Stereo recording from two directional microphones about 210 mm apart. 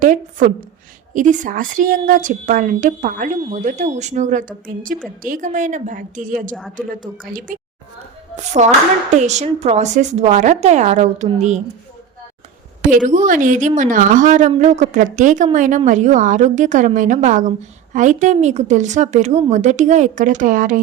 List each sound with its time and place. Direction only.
0.0 s a woman's voice: 40° right (ahead or behind)
12.8 s a woman's voice: 40° right (ahead or behind)